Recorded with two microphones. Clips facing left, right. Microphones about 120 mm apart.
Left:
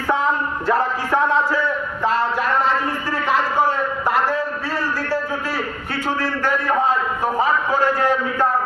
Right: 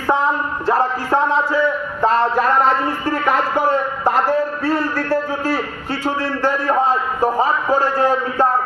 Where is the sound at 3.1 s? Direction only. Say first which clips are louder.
Right 2 dB; 55° right (ahead or behind).